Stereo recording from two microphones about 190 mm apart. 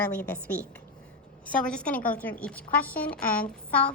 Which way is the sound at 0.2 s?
10° left (ahead or behind).